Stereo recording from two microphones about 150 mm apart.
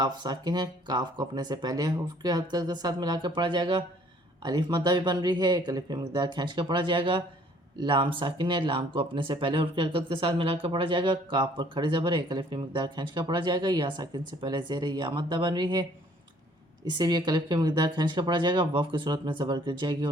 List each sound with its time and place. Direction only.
0.0 s speech: 30° right (ahead or behind)
16.9 s speech: 30° right (ahead or behind)